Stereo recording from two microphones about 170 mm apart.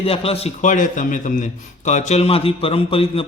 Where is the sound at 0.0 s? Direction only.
35° left (ahead or behind).